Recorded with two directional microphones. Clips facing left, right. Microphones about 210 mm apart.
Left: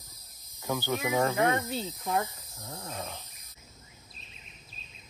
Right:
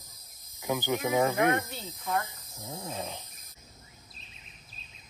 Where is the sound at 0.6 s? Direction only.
15° right (ahead or behind).